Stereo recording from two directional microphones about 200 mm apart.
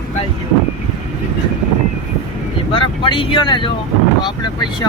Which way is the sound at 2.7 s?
25° left (ahead or behind).